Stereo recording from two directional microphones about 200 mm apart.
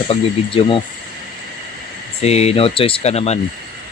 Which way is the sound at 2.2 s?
30° left (ahead or behind).